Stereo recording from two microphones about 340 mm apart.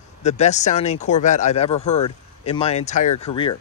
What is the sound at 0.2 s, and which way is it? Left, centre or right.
Speech, centre.